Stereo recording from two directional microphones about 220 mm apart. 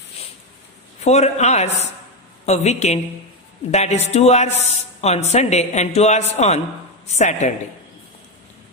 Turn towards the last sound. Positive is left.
turn(degrees=30)  # may be behind; listen again after turning